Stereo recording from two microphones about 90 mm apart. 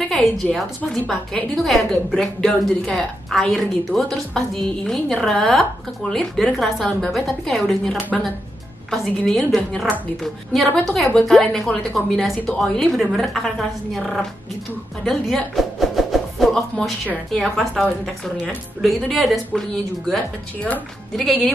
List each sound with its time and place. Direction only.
0.1 s a woman's voice: centre (ahead or behind)
15.0 s music: centre (ahead or behind)
16.7 s a woman's voice: centre (ahead or behind)
20.5 s speech: 15° left (ahead or behind)